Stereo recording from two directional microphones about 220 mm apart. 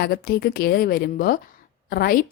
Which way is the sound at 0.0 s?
45° left (ahead or behind).